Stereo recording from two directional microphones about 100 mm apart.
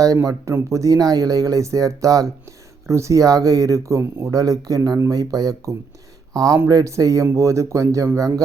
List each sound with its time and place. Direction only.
0.0 s speech: 35° right (ahead or behind)